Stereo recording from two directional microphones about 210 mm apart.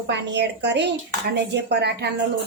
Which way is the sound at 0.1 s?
55° right (ahead or behind).